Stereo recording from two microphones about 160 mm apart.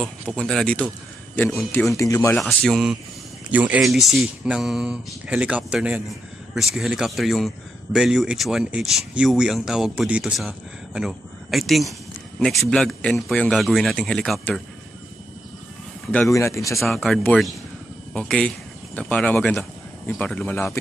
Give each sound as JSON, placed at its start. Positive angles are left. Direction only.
{"t": 0.0, "sound": "speech", "side_deg": 0}
{"t": 1.7, "sound": "speech", "side_deg": 15}
{"t": 2.3, "sound": "speech", "side_deg": 0}
{"t": 16.1, "sound": "speech", "side_deg": 15}
{"t": 16.8, "sound": "speech", "side_deg": 0}